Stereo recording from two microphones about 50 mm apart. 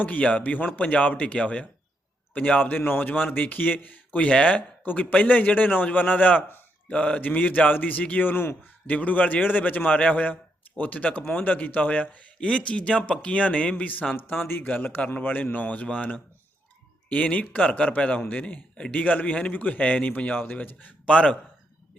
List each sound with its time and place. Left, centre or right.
0.0 s speech: left
8.9 s speech: left
12.4 s speech: left
14.1 s speech: left